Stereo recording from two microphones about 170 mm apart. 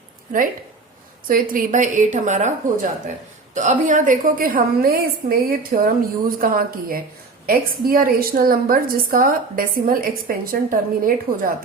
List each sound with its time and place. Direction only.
1.3 s a woman's voice: 55° right (ahead or behind)